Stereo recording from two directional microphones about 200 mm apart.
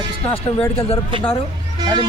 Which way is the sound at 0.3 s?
10° left (ahead or behind).